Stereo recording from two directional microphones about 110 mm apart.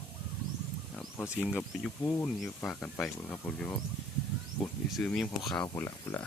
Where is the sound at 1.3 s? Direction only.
5° right (ahead or behind).